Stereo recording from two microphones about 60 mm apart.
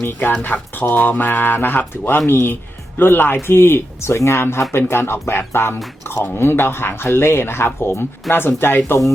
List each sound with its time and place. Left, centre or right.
0.0 s speech: left